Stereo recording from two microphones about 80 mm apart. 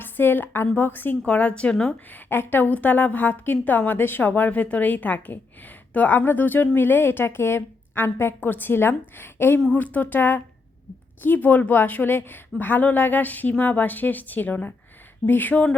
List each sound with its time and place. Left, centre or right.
0.0 s a woman's voice: left
2.0 s a woman's voice: left